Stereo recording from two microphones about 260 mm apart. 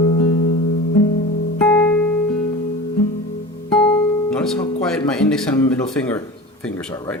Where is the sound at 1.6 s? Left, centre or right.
Centre.